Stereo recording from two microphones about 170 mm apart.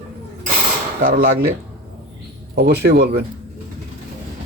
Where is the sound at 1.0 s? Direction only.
55° right (ahead or behind).